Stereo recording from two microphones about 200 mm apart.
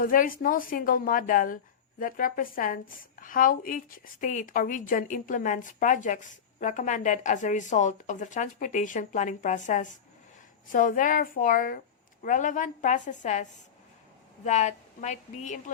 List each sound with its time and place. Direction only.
0.0 s a woman's voice: 45° left (ahead or behind)